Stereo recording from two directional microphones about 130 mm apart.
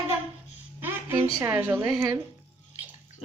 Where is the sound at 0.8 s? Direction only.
15° right (ahead or behind).